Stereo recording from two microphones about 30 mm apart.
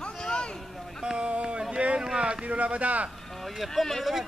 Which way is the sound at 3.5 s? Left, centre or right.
Centre.